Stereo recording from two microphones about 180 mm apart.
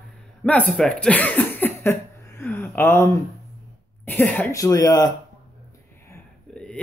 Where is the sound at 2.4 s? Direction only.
10° left (ahead or behind).